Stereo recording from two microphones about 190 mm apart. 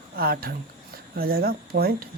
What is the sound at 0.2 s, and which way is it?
Speech, 55° right (ahead or behind).